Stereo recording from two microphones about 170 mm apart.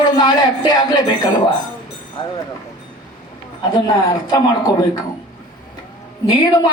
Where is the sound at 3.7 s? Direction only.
25° left (ahead or behind).